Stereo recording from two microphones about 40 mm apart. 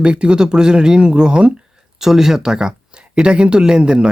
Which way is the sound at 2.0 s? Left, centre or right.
Centre.